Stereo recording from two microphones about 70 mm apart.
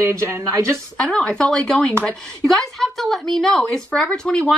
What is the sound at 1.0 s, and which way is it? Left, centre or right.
Speech, centre.